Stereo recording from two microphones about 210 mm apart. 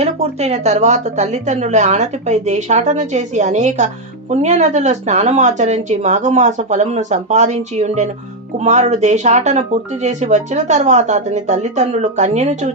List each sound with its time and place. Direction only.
0.0 s speech: 30° right (ahead or behind)